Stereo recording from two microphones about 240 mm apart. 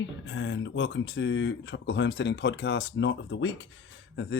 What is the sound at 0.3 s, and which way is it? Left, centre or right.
Speech, left.